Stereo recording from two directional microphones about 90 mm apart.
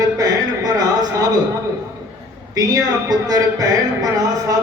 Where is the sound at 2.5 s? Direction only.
45° right (ahead or behind).